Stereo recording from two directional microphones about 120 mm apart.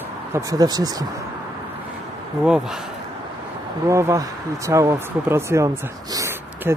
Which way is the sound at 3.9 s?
25° right (ahead or behind).